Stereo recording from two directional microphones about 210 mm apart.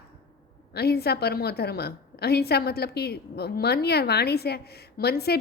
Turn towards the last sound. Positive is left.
turn(degrees=50)  # may be behind; listen again after turning